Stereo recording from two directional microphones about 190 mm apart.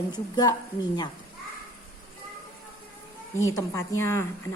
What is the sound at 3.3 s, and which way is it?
Speech, 15° left (ahead or behind).